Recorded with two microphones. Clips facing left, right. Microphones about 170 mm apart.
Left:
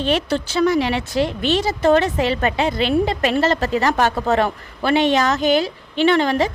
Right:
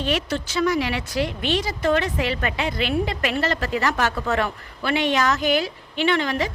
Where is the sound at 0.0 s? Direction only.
30° left (ahead or behind).